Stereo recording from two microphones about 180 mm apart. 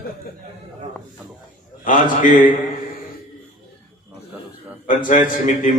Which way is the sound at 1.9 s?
50° left (ahead or behind).